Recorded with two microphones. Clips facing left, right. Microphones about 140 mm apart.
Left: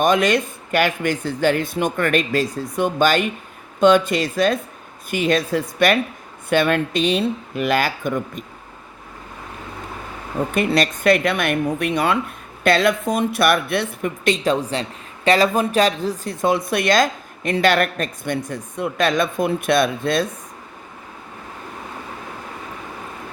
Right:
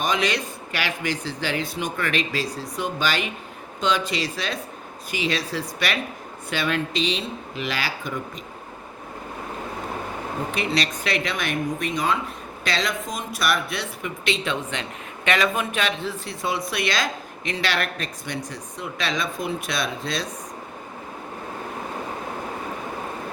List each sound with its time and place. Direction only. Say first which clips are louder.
0.0 s speech: left 7 dB; 50° left (ahead or behind)
10.5 s a woman's voice: left 7 dB; 50° left (ahead or behind)